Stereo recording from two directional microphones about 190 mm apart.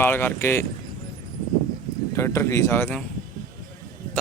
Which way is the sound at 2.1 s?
15° left (ahead or behind).